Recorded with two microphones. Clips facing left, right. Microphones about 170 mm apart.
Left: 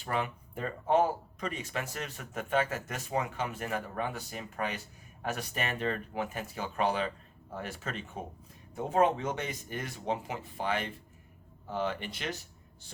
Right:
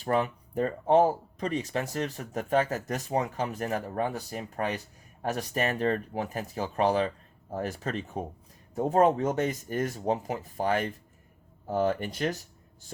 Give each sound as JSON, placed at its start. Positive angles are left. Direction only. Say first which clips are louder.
{"t": 0.0, "sound": "speech", "louder": "right 6 dB", "side_deg": -40}